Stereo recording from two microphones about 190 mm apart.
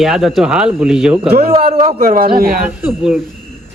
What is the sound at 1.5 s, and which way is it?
Speech, 30° right (ahead or behind).